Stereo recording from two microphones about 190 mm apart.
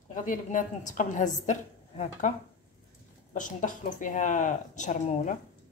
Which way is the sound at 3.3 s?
45° left (ahead or behind).